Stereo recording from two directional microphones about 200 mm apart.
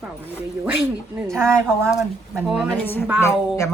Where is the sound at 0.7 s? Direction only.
10° right (ahead or behind).